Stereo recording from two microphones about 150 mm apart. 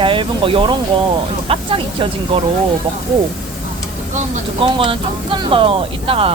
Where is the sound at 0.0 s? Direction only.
35° right (ahead or behind).